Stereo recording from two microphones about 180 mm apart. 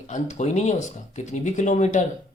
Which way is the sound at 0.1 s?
40° left (ahead or behind).